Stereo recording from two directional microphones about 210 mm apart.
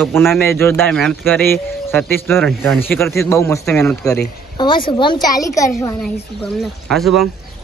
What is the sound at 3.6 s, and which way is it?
Speech, 5° left (ahead or behind).